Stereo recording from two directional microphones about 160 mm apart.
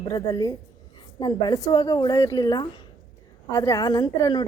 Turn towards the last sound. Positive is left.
turn(degrees=25)  # may be behind; listen again after turning